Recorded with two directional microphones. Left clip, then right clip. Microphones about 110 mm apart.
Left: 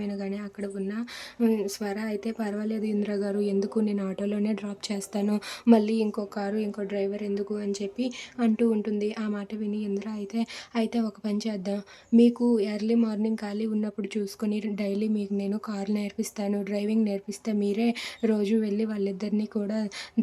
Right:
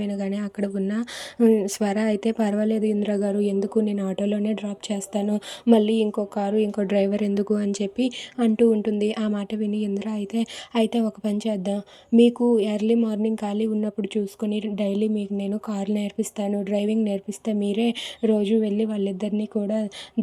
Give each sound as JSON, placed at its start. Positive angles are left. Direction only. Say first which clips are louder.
{"t": 0.0, "sound": "a woman's voice", "louder": "right 5 dB", "side_deg": -40}
{"t": 6.7, "sound": "a woman's voice", "louder": "right 7 dB", "side_deg": -70}